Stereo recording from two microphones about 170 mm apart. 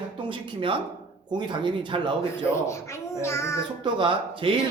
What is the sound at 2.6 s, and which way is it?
Speech, 15° left (ahead or behind).